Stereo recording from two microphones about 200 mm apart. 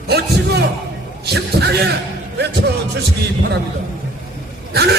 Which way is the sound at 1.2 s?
55° right (ahead or behind).